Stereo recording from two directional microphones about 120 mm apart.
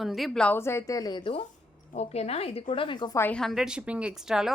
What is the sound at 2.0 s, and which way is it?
A woman's voice, 60° left (ahead or behind).